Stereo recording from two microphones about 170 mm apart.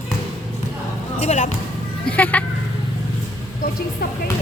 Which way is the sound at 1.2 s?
45° left (ahead or behind).